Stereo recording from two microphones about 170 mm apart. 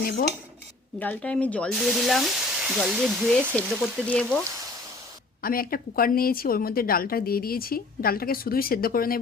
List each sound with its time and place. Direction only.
0.0 s a woman's voice: 60° left (ahead or behind)
0.9 s speech: 10° left (ahead or behind)
5.4 s a woman's voice: 60° left (ahead or behind)